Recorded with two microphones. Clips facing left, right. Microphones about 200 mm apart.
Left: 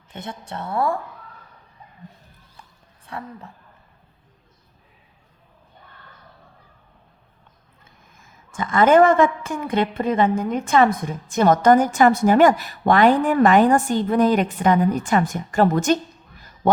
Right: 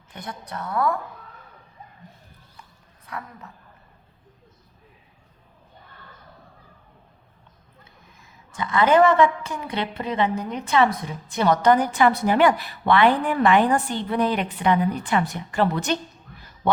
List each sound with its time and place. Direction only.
0.1 s a woman's voice: 25° left (ahead or behind)
3.1 s a woman's voice: 30° left (ahead or behind)
8.2 s a woman's voice: 50° left (ahead or behind)